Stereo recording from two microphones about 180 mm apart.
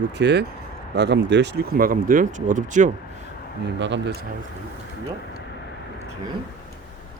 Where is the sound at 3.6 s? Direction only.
75° right (ahead or behind).